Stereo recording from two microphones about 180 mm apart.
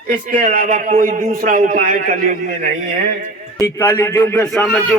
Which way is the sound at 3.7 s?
15° left (ahead or behind).